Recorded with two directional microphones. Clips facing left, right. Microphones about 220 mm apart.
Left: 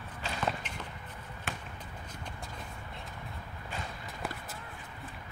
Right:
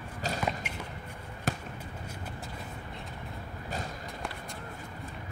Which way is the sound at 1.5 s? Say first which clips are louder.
Right 8 dB; 40° right (ahead or behind).